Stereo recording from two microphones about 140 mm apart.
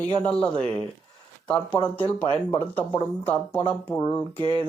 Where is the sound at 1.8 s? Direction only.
35° left (ahead or behind).